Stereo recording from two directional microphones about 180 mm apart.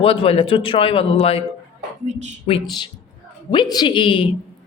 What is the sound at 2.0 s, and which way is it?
Speech, 40° right (ahead or behind).